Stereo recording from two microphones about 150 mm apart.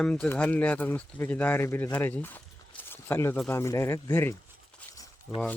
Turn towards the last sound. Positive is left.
turn(degrees=0)  # may be behind; listen again after turning